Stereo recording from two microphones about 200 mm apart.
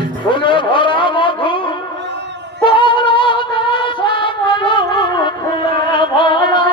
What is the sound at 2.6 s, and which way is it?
Music, 25° left (ahead or behind).